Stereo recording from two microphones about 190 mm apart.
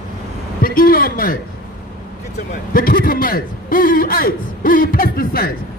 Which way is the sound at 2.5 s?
50° left (ahead or behind).